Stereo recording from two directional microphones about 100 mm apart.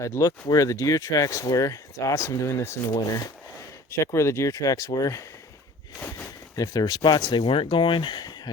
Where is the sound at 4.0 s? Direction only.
30° left (ahead or behind).